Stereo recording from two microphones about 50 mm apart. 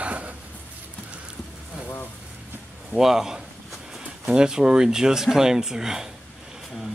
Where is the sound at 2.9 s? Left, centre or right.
Centre.